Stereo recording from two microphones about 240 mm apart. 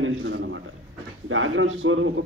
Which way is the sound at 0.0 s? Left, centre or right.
Right.